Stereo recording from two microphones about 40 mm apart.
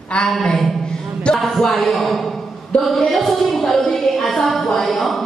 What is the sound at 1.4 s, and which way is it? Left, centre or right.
A man's voice, centre.